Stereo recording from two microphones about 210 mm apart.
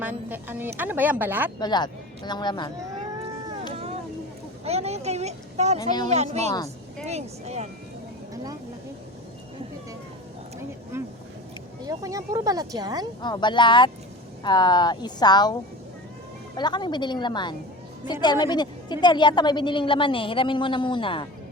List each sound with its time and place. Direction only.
0.0 s speech: 10° right (ahead or behind)
1.5 s a woman's voice: 20° left (ahead or behind)
4.6 s vehicle: 30° right (ahead or behind)
5.8 s a woman's voice: 20° left (ahead or behind)
6.1 s speech: 30° right (ahead or behind)
10.9 s vehicle: 10° right (ahead or behind)
11.9 s speech: 15° right (ahead or behind)
13.2 s a woman's voice: 20° left (ahead or behind)
16.6 s a woman's voice: 20° left (ahead or behind)